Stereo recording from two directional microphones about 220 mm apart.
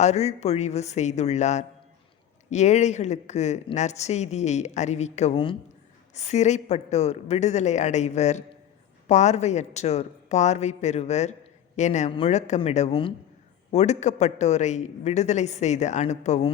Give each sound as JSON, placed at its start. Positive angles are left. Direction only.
{"t": 0.0, "sound": "a woman's voice", "side_deg": 30}